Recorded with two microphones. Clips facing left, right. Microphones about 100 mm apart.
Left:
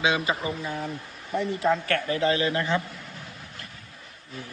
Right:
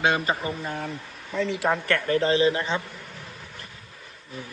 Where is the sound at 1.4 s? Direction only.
85° right.